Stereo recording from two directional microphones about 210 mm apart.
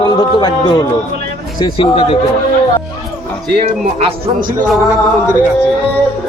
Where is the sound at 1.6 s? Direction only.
25° left (ahead or behind).